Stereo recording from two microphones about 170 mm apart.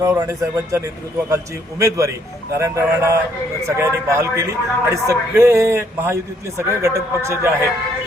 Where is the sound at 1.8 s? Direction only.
20° right (ahead or behind).